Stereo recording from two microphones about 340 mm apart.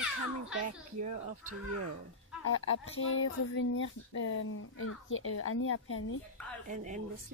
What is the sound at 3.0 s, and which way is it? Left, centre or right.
Speech, left.